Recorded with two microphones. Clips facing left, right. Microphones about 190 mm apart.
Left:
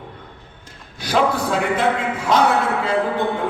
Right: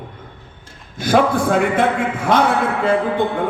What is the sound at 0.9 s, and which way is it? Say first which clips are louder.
A man's voice: right 4 dB; 50° right (ahead or behind).